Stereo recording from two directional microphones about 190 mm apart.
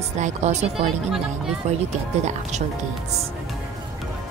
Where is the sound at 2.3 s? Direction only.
40° right (ahead or behind).